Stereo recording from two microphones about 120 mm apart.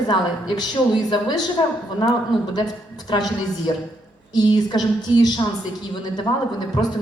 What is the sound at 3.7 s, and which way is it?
A woman's voice, 40° left (ahead or behind).